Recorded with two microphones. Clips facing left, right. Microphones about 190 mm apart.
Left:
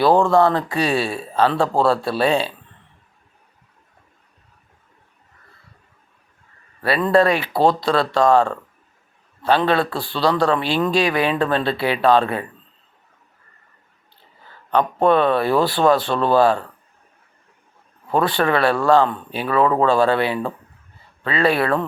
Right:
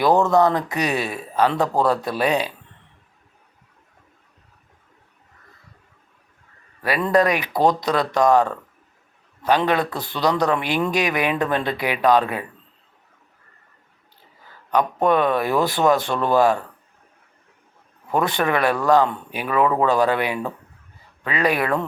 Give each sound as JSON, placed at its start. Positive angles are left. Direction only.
{"t": 0.0, "sound": "speech", "side_deg": -20}
{"t": 7.1, "sound": "a man's voice", "side_deg": -15}
{"t": 15.0, "sound": "a man's voice", "side_deg": -15}
{"t": 18.2, "sound": "a man's voice", "side_deg": -20}